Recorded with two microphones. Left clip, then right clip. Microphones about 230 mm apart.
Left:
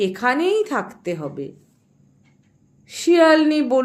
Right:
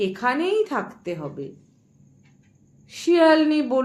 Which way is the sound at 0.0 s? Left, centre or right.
Left.